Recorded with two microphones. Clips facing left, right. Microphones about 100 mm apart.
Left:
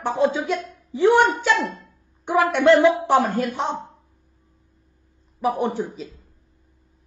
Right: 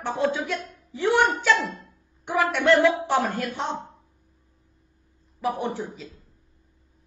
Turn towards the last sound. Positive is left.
turn(degrees=15)  # may be behind; listen again after turning